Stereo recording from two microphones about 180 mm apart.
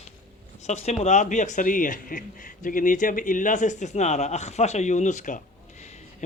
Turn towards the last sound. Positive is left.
turn(degrees=40)  # may be behind; listen again after turning